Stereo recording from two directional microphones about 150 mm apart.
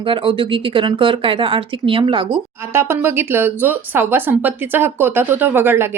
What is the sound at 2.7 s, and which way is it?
Speech, 15° right (ahead or behind).